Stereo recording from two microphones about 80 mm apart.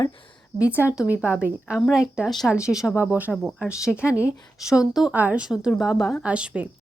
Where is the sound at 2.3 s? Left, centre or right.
Centre.